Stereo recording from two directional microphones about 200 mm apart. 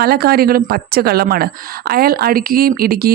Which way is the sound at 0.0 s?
50° right (ahead or behind).